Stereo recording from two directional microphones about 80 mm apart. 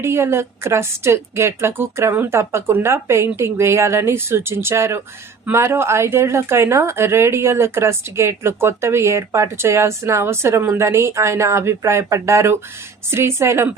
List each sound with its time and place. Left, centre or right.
0.0 s speech: right